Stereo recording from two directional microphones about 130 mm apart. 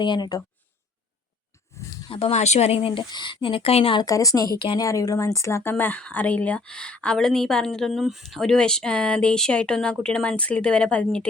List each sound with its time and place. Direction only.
0.0 s speech: 35° left (ahead or behind)
2.0 s a woman's voice: 45° left (ahead or behind)
3.9 s speech: 25° left (ahead or behind); by 11.3 s 10° left (ahead or behind)